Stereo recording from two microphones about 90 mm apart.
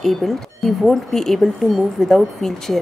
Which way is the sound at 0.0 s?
Centre (ahead or behind).